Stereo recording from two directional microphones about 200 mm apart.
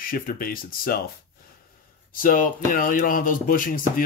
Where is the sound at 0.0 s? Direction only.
45° left (ahead or behind).